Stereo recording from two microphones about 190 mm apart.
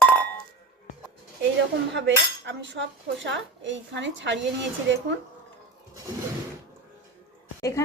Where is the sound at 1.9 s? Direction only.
70° right (ahead or behind).